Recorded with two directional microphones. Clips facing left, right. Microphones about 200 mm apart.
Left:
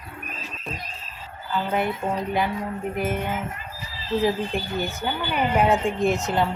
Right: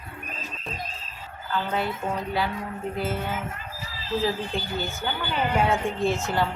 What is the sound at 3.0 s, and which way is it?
Speech, 15° left (ahead or behind).